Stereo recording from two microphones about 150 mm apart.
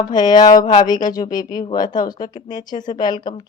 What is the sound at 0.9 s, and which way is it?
A woman's voice, 25° left (ahead or behind).